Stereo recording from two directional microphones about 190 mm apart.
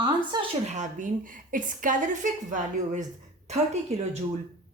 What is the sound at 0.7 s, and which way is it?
A woman's voice, 40° right (ahead or behind).